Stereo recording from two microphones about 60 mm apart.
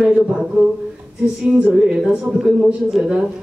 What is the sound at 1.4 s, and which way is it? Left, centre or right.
Music, right.